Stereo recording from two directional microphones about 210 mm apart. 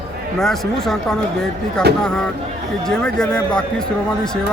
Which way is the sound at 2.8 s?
5° left (ahead or behind).